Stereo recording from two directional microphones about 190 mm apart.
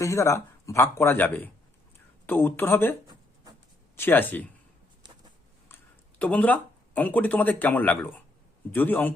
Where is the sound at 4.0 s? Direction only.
10° left (ahead or behind).